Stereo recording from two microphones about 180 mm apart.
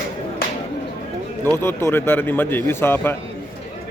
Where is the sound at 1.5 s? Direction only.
15° left (ahead or behind).